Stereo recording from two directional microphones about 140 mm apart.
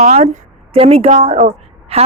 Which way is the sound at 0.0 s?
55° right (ahead or behind).